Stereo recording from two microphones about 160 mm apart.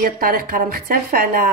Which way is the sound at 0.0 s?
65° right (ahead or behind).